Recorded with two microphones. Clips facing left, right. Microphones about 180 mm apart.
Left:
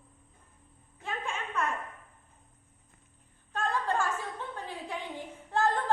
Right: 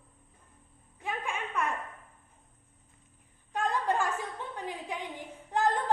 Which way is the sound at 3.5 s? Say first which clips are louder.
Right 1 dB; 15° right (ahead or behind).